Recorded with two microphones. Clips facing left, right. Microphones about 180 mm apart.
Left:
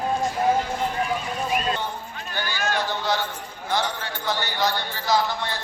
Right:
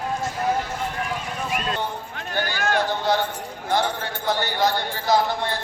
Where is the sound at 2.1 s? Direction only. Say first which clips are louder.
Right 6 dB; 55° right (ahead or behind).